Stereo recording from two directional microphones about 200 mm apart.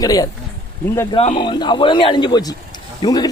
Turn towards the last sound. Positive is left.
turn(degrees=20)  # may be behind; listen again after turning